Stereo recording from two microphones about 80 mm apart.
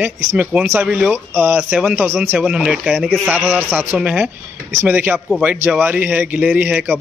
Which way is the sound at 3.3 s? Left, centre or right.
Right.